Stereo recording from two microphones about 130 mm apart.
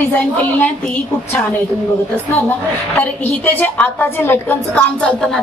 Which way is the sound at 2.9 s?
15° left (ahead or behind).